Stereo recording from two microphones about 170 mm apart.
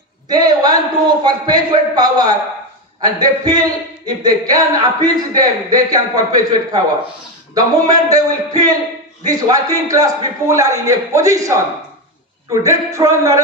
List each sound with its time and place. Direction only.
0.3 s speech: 25° right (ahead or behind)